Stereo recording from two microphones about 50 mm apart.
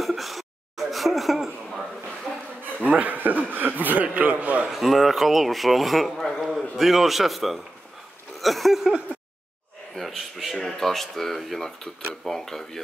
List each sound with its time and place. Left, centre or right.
0.0 s a sound: centre
2.9 s a man's voice: right
4.6 s speech: centre
6.4 s a man's voice: centre
9.9 s speech: centre